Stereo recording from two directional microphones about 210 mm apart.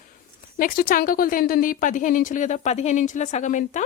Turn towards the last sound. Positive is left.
turn(degrees=35)  # may be behind; listen again after turning